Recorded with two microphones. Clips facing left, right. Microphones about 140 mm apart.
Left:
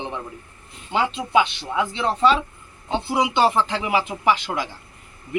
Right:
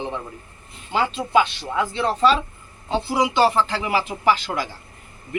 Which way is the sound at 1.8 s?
20° left (ahead or behind).